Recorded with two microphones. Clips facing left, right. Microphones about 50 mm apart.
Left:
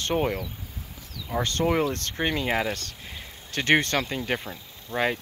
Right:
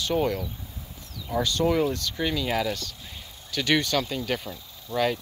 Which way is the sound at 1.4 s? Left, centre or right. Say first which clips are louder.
Right 1 dB; left.